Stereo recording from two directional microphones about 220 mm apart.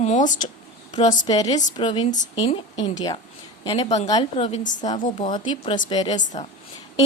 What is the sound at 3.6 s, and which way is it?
Speech, 25° left (ahead or behind).